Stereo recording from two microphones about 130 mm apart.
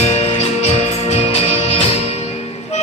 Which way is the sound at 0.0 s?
55° left (ahead or behind).